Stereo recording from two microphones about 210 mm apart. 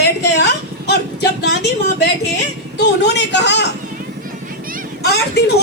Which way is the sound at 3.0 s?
55° left (ahead or behind).